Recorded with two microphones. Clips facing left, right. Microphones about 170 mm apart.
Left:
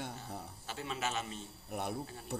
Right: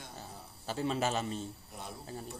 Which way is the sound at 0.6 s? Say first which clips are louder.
Right 8 dB; 35° right (ahead or behind).